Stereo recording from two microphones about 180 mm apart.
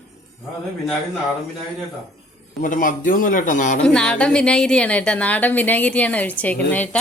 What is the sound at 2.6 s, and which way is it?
A man's voice, 45° left (ahead or behind).